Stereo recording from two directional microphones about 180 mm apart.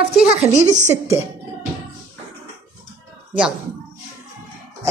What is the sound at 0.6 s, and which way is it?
Speech, 40° right (ahead or behind).